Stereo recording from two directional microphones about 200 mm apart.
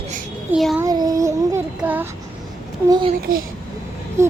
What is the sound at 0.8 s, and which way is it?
Child singing, 20° right (ahead or behind).